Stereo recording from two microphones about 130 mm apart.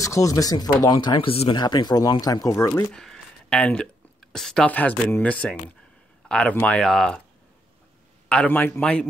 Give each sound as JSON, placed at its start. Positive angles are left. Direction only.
{"t": 0.0, "sound": "speech", "side_deg": 25}
{"t": 1.3, "sound": "speech", "side_deg": 50}
{"t": 1.6, "sound": "speech", "side_deg": 35}
{"t": 2.9, "sound": "speech", "side_deg": 5}
{"t": 8.3, "sound": "speech", "side_deg": 10}